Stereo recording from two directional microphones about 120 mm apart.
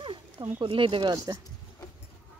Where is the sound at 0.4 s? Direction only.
40° right (ahead or behind).